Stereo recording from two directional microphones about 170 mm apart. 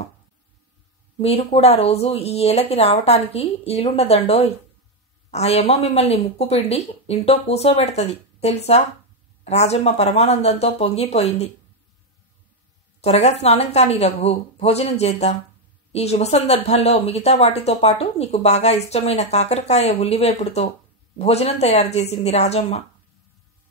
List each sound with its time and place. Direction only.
1.1 s speech: 35° left (ahead or behind)
13.0 s speech: 40° left (ahead or behind)